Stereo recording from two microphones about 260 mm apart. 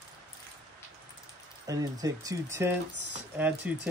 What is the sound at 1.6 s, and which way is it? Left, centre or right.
Speech, centre.